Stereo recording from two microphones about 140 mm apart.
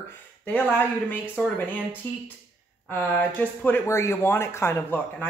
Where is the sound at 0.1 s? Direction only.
10° left (ahead or behind).